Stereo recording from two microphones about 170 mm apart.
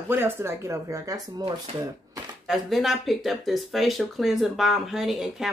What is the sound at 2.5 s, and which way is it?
A woman's voice, centre (ahead or behind).